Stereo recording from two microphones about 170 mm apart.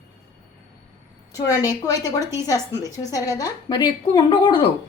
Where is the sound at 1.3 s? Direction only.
20° left (ahead or behind).